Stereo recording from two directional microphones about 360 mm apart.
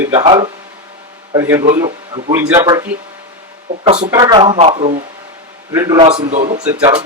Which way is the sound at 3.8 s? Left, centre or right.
Centre.